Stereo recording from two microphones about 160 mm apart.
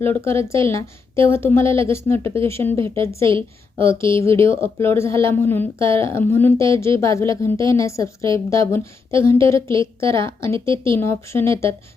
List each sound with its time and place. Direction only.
0.0 s a woman's voice: 15° left (ahead or behind)